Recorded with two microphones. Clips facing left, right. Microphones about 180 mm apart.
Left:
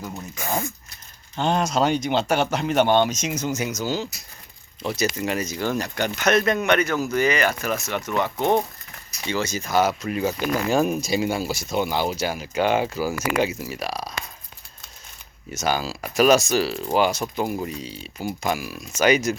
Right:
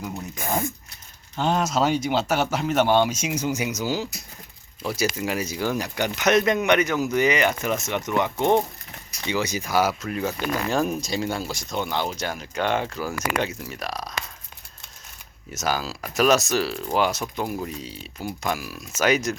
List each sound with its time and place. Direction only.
1.4 s speech: 5° right (ahead or behind)
10.1 s speech: 5° left (ahead or behind)
15.5 s speech: centre (ahead or behind)